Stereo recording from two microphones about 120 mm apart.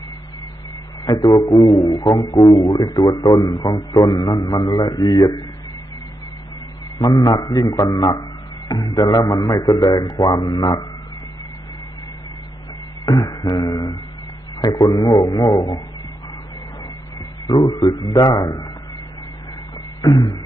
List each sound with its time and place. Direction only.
1.0 s a man's voice: 35° left (ahead or behind)
7.0 s a man's voice: 30° left (ahead or behind)
13.0 s beatboxing: 35° left (ahead or behind)
14.6 s a man's voice: 35° left (ahead or behind)
17.5 s a man's voice: 35° left (ahead or behind)
20.0 s a man's voice: 30° left (ahead or behind)